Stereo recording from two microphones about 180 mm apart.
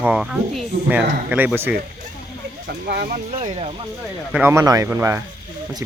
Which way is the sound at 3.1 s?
40° right (ahead or behind).